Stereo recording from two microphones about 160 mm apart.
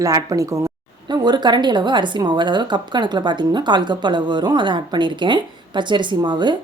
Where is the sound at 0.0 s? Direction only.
20° right (ahead or behind).